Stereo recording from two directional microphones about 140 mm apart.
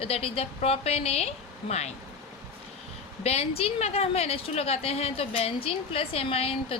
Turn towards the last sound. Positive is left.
turn(degrees=45)  # may be behind; listen again after turning